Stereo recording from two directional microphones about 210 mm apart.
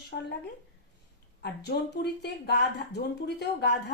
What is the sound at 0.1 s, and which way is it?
Speech, 55° left (ahead or behind).